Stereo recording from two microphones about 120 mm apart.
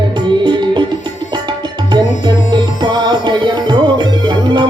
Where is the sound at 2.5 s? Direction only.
40° right (ahead or behind).